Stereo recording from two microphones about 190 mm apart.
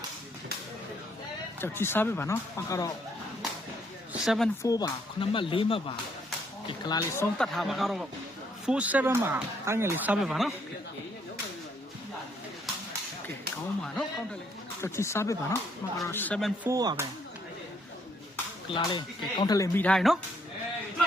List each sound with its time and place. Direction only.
1.6 s speech: 10° left (ahead or behind)
4.1 s speech: centre (ahead or behind)
4.6 s speech: 20° left (ahead or behind)
7.3 s speech: centre (ahead or behind)
10.2 s speech: centre (ahead or behind)
13.8 s speech: 5° left (ahead or behind)
14.8 s speech: 15° left (ahead or behind)
16.6 s speech: 20° right (ahead or behind)
18.7 s speech: 20° left (ahead or behind); by 20.1 s 5° left (ahead or behind)